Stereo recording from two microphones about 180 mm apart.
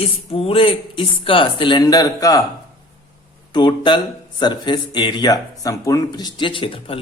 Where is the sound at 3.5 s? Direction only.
25° left (ahead or behind).